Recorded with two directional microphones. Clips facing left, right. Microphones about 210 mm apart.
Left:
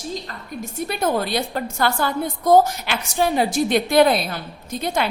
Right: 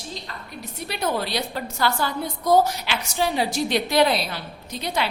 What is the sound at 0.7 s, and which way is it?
A woman's voice, 50° left (ahead or behind).